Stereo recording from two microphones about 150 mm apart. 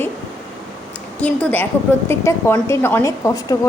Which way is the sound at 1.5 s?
15° left (ahead or behind).